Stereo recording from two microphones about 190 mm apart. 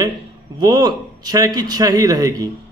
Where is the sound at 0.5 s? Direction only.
20° right (ahead or behind).